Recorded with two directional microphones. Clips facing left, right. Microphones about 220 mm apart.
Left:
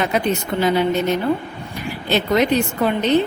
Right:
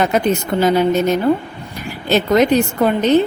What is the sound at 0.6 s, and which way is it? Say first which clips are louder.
Speech: right 3 dB; 45° right (ahead or behind).